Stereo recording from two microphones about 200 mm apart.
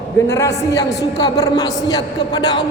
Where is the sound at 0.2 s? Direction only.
15° left (ahead or behind).